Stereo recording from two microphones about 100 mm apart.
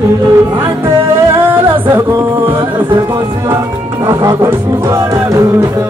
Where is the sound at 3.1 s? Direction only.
25° right (ahead or behind).